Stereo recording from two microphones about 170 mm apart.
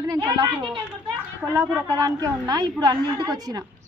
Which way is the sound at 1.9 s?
20° right (ahead or behind).